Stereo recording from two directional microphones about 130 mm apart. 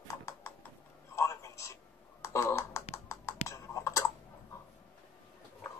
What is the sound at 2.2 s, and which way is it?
Clicking, 20° left (ahead or behind).